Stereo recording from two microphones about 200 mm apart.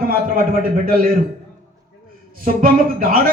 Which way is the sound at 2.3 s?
45° right (ahead or behind).